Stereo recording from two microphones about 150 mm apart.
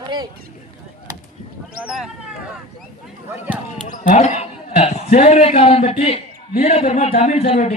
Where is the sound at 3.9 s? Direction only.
55° left (ahead or behind).